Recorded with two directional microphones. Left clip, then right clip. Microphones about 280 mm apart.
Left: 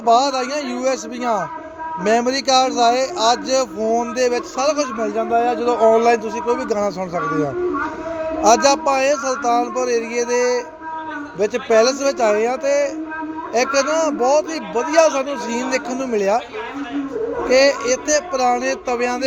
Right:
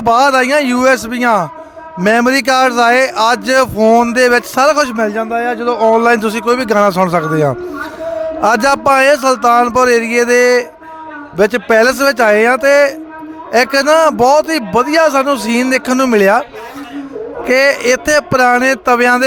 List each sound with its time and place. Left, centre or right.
0.0 s speech: right
8.4 s speech: right
17.4 s speech: right